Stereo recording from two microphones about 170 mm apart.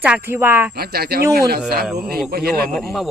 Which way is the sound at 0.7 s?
70° right (ahead or behind).